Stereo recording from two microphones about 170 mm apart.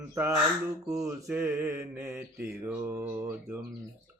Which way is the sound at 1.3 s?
15° right (ahead or behind).